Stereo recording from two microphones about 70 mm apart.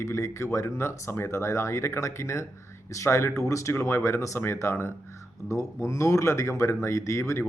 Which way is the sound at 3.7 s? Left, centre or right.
Left.